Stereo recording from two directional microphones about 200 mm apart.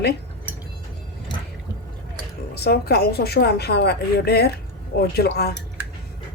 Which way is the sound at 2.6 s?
55° left (ahead or behind).